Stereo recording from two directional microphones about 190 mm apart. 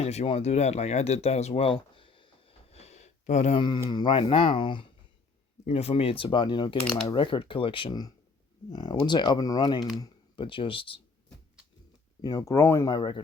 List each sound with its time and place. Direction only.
0.0 s a sound: 35° left (ahead or behind)
3.8 s speech: 25° left (ahead or behind)
6.8 s speech: 5° left (ahead or behind)
7.1 s speech: 25° left (ahead or behind)
12.2 s speech: 20° left (ahead or behind)